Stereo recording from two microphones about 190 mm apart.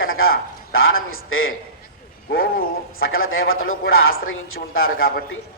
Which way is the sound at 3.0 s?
90° left.